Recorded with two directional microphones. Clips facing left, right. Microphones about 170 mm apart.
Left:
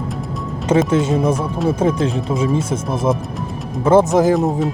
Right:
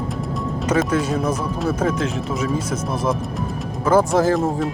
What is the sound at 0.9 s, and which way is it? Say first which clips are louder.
Speech: left 4 dB; 25° left (ahead or behind).